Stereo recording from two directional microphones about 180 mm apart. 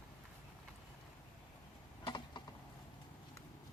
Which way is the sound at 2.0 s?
25° left (ahead or behind).